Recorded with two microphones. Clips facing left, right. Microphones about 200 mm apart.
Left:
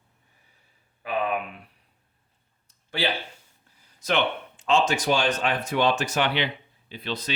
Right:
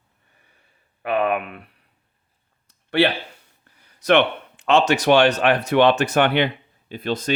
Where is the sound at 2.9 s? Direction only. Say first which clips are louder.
Right 9 dB; 65° right (ahead or behind).